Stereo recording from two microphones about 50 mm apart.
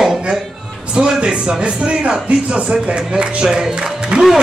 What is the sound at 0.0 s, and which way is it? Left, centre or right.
Music, centre.